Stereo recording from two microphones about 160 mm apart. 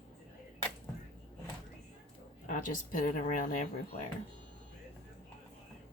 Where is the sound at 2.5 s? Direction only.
55° left (ahead or behind).